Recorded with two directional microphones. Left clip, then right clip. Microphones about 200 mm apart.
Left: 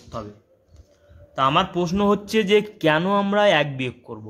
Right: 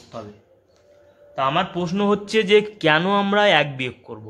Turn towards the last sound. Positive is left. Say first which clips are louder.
# right 1 dB
turn(degrees=10)  # may be behind; listen again after turning